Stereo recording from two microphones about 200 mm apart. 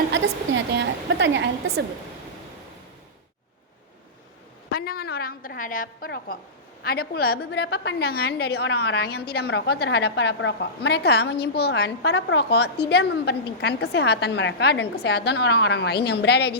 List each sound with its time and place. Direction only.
0.1 s a woman's voice: 60° right (ahead or behind)
4.7 s a woman's voice: 50° left (ahead or behind)